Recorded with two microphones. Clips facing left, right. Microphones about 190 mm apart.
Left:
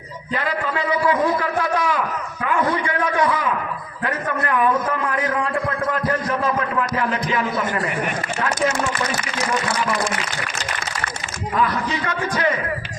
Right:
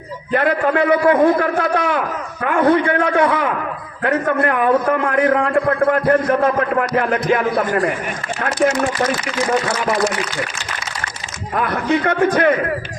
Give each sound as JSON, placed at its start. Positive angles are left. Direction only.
{"t": 0.3, "sound": "a man's voice", "side_deg": -55}
{"t": 11.5, "sound": "a man's voice", "side_deg": -55}